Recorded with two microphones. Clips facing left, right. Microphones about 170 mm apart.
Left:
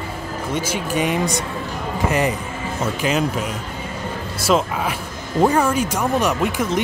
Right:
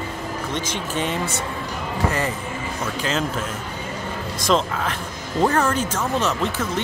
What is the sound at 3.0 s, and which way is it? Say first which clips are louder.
Speech: left 3 dB; 15° left (ahead or behind).